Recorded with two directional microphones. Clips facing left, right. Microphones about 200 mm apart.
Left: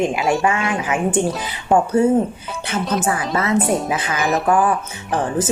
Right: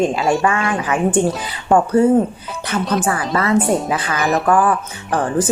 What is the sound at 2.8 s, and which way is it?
A woman's voice, 5° left (ahead or behind).